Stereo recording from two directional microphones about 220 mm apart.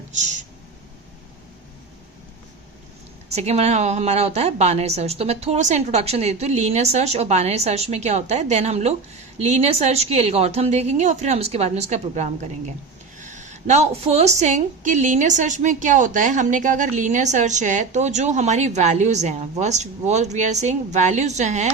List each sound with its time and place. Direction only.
3.3 s a woman's voice: 30° right (ahead or behind)